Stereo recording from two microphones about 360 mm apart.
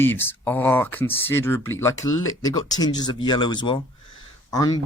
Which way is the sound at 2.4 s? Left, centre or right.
Centre.